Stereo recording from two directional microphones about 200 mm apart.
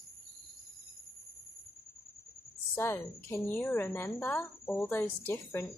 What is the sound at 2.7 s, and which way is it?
A woman's voice, 10° left (ahead or behind).